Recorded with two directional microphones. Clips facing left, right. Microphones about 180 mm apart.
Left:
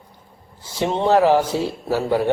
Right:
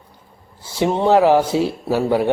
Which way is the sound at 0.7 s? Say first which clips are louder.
Right 2 dB; 10° right (ahead or behind).